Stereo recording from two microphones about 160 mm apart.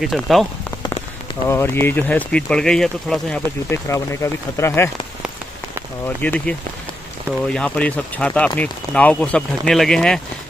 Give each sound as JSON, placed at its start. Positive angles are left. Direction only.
{"t": 0.0, "sound": "speech", "side_deg": 0}
{"t": 1.5, "sound": "speech", "side_deg": 15}
{"t": 3.7, "sound": "speech", "side_deg": 15}
{"t": 6.0, "sound": "speech", "side_deg": 10}